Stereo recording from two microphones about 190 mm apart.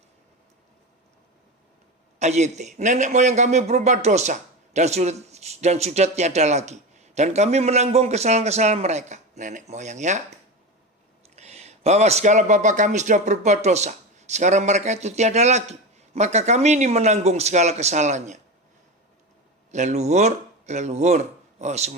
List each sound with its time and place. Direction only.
2.1 s a man's voice: 35° right (ahead or behind)
11.3 s a man's voice: 35° right (ahead or behind)
19.7 s a man's voice: 35° right (ahead or behind)